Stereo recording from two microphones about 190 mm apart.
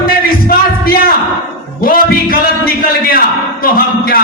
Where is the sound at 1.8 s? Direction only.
50° left (ahead or behind).